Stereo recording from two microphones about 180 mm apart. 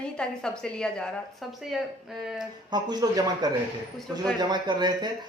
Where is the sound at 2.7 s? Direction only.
25° right (ahead or behind).